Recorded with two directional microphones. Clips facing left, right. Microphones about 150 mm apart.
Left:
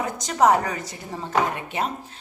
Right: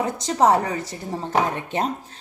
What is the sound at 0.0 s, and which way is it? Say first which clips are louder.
A woman's voice: right 1 dB; 30° right (ahead or behind).